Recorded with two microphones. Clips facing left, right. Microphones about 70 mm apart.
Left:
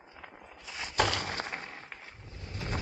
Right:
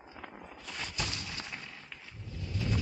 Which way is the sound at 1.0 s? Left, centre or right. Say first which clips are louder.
Left 14 dB; left.